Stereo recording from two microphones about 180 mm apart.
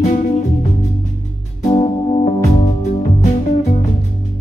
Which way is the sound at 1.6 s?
35° left (ahead or behind).